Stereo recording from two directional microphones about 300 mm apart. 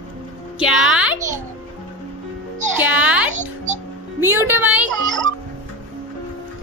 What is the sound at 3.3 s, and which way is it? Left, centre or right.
Music, right.